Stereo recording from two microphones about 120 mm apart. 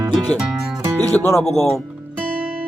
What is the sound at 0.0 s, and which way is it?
Music, 30° right (ahead or behind).